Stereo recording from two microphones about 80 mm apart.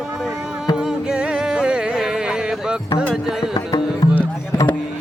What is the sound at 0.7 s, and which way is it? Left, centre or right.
Music, centre.